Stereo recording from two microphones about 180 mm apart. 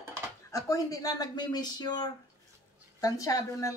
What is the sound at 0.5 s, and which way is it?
Speech, 20° left (ahead or behind).